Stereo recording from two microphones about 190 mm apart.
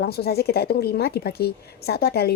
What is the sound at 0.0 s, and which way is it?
A woman's voice, 55° left (ahead or behind).